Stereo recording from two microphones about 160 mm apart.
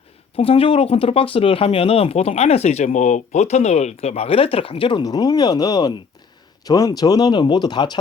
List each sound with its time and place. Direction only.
0.3 s speech: 35° left (ahead or behind)